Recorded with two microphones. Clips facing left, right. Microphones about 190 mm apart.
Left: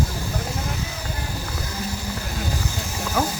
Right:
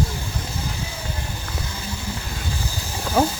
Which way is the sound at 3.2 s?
30° right (ahead or behind).